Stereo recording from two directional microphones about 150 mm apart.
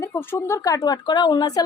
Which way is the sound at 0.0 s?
15° left (ahead or behind).